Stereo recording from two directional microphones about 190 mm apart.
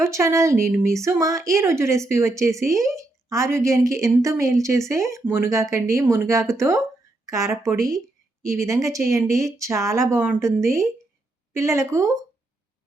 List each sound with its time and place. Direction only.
0.0 s a woman's voice: 15° right (ahead or behind)